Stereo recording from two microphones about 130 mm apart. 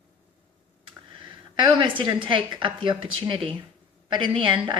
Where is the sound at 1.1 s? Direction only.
40° right (ahead or behind).